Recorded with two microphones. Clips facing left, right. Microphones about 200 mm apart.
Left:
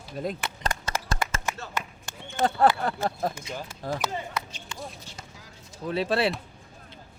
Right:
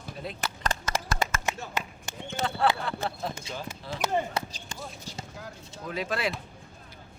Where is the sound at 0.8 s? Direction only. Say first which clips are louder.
Right 1 dB; 30° left (ahead or behind).